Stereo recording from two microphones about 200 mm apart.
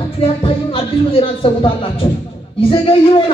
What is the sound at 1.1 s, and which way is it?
Speech, 25° left (ahead or behind).